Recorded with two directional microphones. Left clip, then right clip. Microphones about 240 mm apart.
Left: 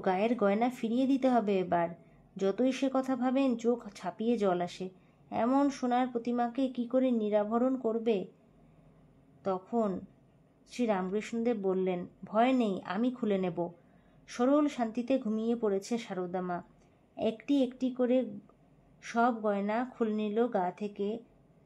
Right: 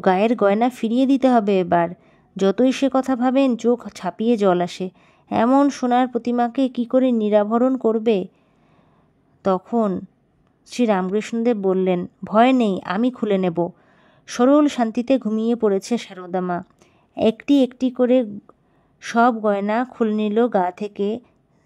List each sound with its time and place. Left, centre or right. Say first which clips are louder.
0.0 s speech: right 12 dB; right
9.4 s speech: right 12 dB; right